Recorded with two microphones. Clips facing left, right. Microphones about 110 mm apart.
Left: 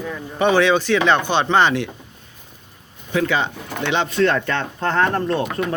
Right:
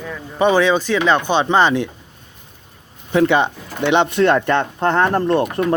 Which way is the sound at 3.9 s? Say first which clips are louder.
Right 4 dB; 15° right (ahead or behind).